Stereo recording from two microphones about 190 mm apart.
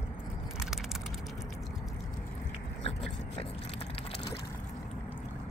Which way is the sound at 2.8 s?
30° left (ahead or behind).